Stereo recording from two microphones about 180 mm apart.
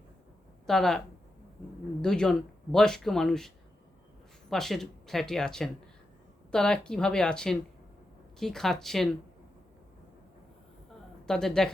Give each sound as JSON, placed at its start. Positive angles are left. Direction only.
{"t": 0.7, "sound": "speech", "side_deg": 0}
{"t": 11.3, "sound": "speech", "side_deg": 5}